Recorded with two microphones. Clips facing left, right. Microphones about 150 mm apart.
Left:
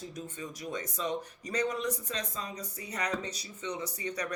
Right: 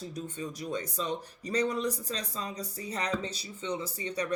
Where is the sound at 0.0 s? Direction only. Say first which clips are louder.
Right 3 dB; 35° right (ahead or behind).